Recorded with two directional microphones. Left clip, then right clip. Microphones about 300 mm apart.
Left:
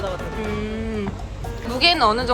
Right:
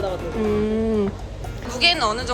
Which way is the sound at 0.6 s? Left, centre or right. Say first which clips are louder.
Right 6 dB; centre.